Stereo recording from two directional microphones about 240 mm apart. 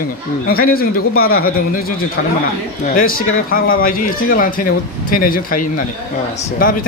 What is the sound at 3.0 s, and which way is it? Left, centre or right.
A man's voice, left.